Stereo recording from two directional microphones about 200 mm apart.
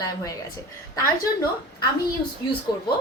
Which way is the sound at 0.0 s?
15° left (ahead or behind).